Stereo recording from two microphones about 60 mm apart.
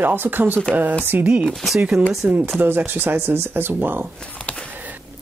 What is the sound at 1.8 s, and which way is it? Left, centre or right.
Speech, centre.